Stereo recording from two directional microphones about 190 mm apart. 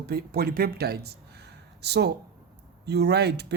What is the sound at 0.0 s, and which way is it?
Speech, 55° right (ahead or behind).